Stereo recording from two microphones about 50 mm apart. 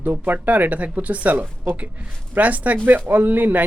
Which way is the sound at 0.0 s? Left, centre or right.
Right.